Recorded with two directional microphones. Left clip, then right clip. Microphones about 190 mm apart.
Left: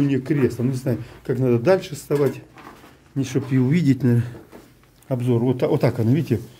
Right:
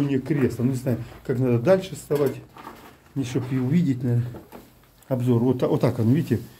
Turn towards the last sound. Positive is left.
turn(degrees=25)  # may be behind; listen again after turning